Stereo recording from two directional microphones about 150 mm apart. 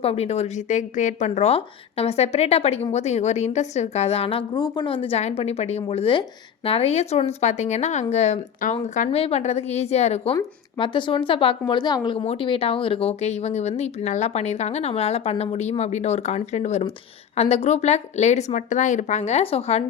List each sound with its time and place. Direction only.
0.0 s speech: 40° left (ahead or behind)
9.0 s speech: 40° left (ahead or behind)
10.8 s a woman's voice: 35° left (ahead or behind)